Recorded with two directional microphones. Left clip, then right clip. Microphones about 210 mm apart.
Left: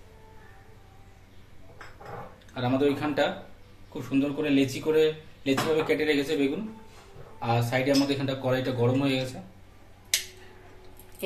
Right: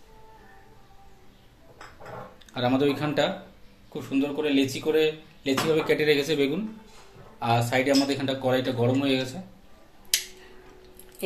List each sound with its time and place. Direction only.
2.5 s speech: 30° right (ahead or behind); by 9.3 s 15° right (ahead or behind)